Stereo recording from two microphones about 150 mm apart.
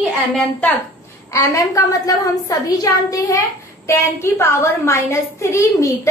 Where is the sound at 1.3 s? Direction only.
20° left (ahead or behind).